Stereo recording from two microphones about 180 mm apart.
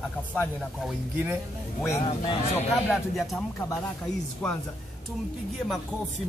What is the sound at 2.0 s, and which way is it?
Speech, 25° left (ahead or behind).